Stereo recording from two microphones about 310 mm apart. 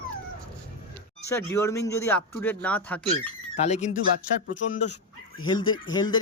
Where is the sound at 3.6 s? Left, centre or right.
Left.